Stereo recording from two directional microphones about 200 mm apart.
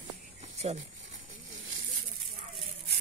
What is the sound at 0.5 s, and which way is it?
Speech, 30° right (ahead or behind).